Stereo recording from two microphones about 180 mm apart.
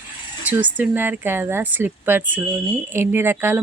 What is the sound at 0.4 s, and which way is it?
Speech, 10° right (ahead or behind).